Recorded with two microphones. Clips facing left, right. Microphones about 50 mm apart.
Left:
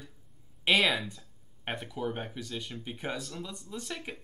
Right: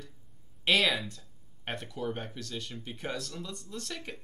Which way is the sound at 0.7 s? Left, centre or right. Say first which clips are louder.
Left 1 dB; centre.